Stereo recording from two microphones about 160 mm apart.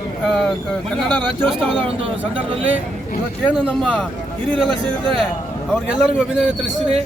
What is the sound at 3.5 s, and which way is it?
Speech, 5° left (ahead or behind).